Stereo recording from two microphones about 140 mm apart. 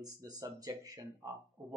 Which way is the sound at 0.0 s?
25° right (ahead or behind).